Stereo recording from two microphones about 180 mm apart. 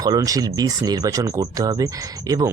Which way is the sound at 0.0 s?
20° right (ahead or behind).